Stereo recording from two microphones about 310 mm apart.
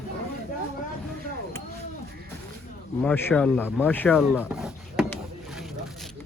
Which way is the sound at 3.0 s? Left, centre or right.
Centre.